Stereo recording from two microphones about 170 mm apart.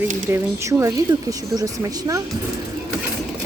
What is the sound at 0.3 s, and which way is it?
Speech, 20° right (ahead or behind).